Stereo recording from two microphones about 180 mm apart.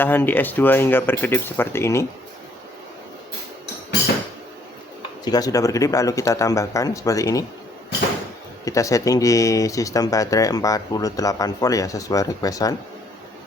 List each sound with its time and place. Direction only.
0.0 s speech: 10° left (ahead or behind)
5.2 s speech: 20° left (ahead or behind)
8.6 s speech: 15° left (ahead or behind)